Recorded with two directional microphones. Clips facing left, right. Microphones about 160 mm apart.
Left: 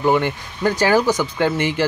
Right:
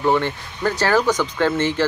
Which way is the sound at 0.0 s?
15° left (ahead or behind).